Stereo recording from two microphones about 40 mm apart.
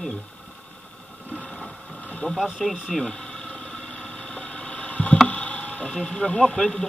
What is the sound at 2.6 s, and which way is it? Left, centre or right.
Engine, centre.